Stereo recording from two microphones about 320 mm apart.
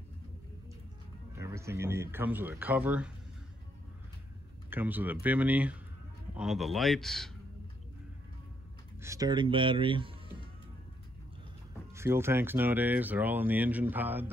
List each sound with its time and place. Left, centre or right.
1.4 s speech: centre
4.6 s speech: centre
9.0 s speech: centre
11.9 s speech: centre